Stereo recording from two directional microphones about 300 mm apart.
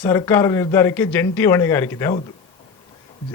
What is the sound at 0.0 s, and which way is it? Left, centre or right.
Speech, centre.